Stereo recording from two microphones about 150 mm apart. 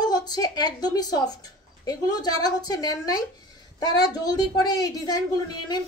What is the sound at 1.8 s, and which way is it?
A woman's voice, 25° left (ahead or behind).